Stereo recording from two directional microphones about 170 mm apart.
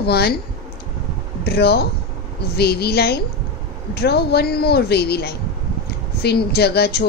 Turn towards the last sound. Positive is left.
turn(degrees=70)  # may be behind; listen again after turning